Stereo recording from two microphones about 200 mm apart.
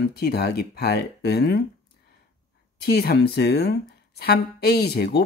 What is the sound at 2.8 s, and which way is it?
Speech, 50° left (ahead or behind).